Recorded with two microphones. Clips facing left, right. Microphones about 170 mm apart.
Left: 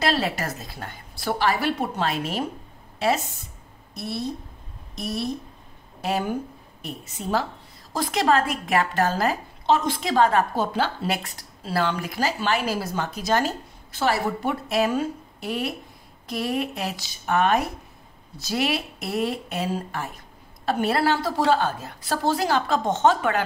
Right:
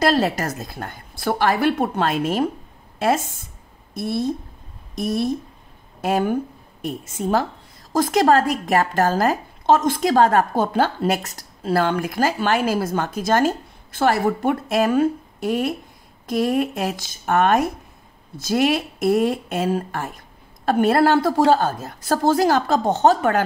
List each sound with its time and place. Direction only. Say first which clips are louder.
0.0 s a woman's voice: right 5 dB; 45° right (ahead or behind)